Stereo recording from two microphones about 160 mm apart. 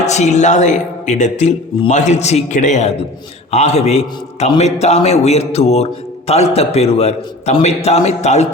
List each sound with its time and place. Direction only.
0.0 s a man's voice: 45° left (ahead or behind)